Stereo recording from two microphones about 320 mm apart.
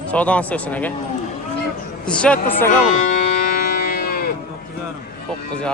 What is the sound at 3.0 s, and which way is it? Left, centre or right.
Music, left.